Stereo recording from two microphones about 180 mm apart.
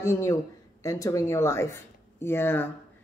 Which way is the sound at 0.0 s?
15° left (ahead or behind).